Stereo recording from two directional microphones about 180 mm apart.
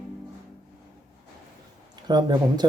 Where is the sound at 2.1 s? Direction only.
20° right (ahead or behind).